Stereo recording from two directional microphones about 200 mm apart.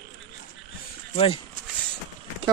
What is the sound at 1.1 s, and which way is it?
Speech, 25° left (ahead or behind).